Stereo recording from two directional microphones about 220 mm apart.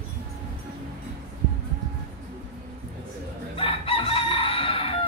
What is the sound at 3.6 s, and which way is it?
Chicken, 25° left (ahead or behind).